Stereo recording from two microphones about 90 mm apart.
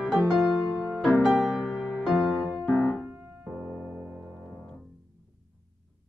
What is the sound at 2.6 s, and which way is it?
Keyboard, 20° left (ahead or behind).